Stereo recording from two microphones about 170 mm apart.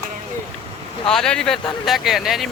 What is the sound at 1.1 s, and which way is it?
Speech, 5° left (ahead or behind).